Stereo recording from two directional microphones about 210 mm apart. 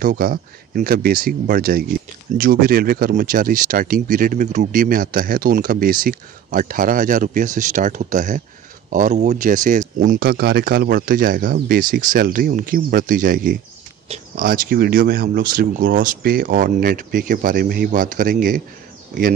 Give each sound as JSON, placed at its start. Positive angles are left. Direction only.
{"t": 0.0, "sound": "speech", "side_deg": -45}